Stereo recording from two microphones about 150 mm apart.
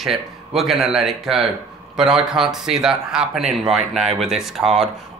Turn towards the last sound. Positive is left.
turn(degrees=0)  # may be behind; listen again after turning